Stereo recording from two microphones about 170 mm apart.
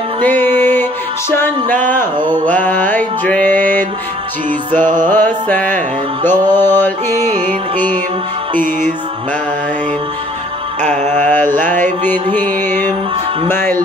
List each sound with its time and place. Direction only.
0.2 s music: 10° left (ahead or behind)
5.0 s music: 10° left (ahead or behind)
10.8 s mantra: 45° right (ahead or behind)
11.2 s mantra: 10° left (ahead or behind)
11.6 s music: 10° left (ahead or behind)
13.5 s speech: 10° left (ahead or behind)